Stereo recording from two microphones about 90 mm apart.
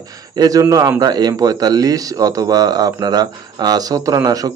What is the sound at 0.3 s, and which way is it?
A man's voice, 45° right (ahead or behind).